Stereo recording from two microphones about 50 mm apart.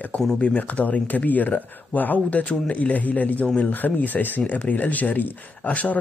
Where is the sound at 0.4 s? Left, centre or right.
Left.